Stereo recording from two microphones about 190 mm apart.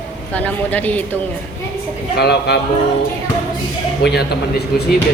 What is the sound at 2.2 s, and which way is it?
Speech, 60° left (ahead or behind).